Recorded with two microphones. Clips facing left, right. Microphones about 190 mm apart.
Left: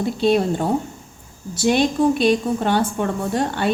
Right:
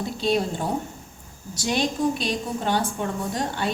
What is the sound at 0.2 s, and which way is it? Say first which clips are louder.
A woman's voice: left 6 dB; 60° left (ahead or behind).